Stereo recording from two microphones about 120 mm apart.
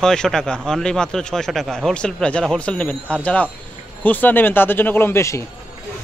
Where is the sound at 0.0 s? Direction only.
5° left (ahead or behind).